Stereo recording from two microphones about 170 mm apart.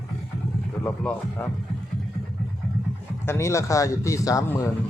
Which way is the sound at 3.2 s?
15° left (ahead or behind).